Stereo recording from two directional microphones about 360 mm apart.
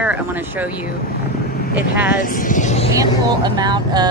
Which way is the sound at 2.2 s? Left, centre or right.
Left.